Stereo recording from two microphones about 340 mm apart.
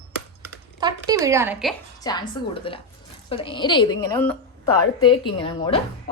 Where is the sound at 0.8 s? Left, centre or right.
Centre.